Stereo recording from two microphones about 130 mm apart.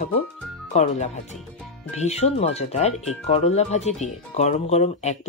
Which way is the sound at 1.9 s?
55° left (ahead or behind).